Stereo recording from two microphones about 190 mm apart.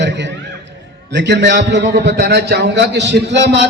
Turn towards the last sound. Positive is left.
turn(degrees=-70)  # may be behind; listen again after turning